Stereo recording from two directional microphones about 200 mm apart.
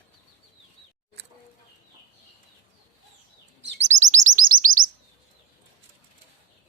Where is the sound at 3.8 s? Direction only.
35° right (ahead or behind).